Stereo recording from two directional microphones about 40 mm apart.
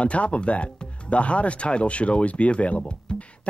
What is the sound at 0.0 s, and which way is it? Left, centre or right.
Speech, left.